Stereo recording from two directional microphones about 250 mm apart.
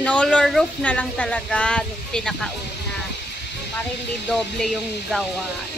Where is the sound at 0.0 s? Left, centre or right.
Centre.